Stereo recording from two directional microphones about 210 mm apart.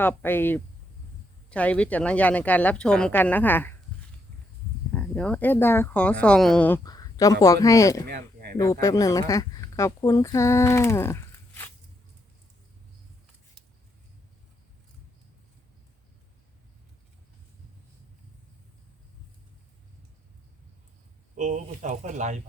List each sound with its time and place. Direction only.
0.0 s speech: 10° left (ahead or behind)
4.9 s speech: 5° left (ahead or behind)
8.0 s a sound: 50° right (ahead or behind)
8.5 s speech: 15° left (ahead or behind)
21.3 s speech: 35° right (ahead or behind)